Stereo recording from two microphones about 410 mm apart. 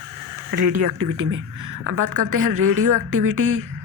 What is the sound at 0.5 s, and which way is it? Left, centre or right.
Speech, right.